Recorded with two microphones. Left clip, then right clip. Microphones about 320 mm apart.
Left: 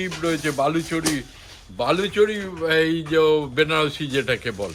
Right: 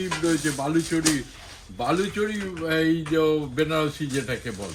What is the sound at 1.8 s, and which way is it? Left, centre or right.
A man's voice, centre.